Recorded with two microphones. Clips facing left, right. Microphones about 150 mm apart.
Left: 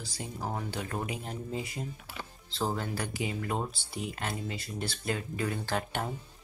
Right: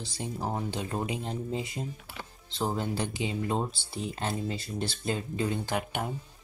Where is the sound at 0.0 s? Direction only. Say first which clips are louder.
Right 3 dB; 25° right (ahead or behind).